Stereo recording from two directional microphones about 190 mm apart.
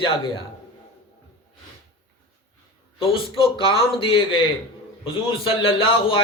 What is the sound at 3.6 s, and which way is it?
Speech, 25° left (ahead or behind).